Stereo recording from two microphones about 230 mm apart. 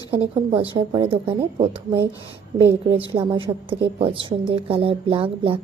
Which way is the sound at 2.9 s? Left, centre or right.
Right.